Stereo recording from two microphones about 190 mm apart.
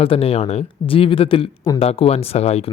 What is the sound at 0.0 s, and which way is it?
A man's voice, 30° left (ahead or behind).